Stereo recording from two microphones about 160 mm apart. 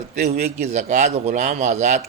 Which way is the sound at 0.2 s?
45° right (ahead or behind).